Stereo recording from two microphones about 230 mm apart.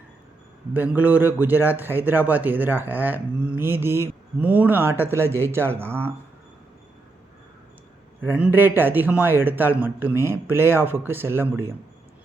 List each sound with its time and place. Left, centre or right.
0.7 s a man's voice: centre
8.2 s a man's voice: centre